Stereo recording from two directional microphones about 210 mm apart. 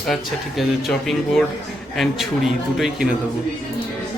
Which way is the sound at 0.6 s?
Centre (ahead or behind).